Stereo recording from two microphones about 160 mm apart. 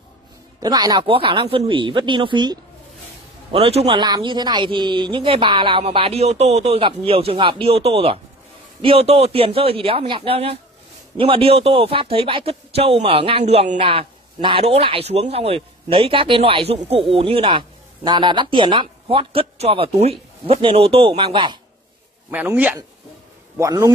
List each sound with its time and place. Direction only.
0.6 s speech: 25° right (ahead or behind)
22.3 s a man's voice: 10° right (ahead or behind)